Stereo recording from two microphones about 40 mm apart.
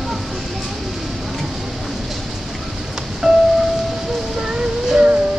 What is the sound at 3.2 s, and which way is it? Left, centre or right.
Vehicle, centre.